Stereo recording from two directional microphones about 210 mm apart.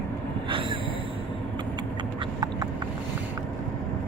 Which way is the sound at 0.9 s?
25° left (ahead or behind).